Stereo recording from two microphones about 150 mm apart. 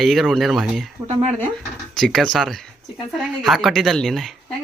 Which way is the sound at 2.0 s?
Centre (ahead or behind).